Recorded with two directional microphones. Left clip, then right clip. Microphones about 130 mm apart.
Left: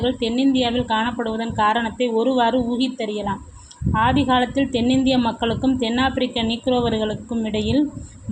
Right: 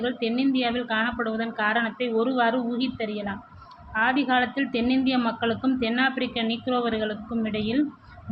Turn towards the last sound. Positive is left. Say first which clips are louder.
# left 5 dB
turn(degrees=35)  # may be behind; listen again after turning